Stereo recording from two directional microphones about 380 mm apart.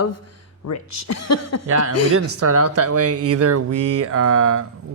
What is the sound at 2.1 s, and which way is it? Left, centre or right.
Speech, right.